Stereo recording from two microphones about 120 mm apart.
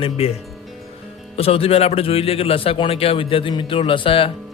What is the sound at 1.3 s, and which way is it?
Speech, 55° left (ahead or behind).